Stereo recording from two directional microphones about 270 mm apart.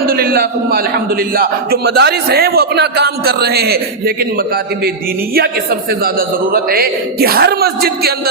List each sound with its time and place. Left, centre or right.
0.1 s a man's voice: right
6.1 s a man's voice: right